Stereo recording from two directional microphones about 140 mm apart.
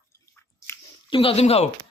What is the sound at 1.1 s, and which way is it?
Speech, 40° left (ahead or behind).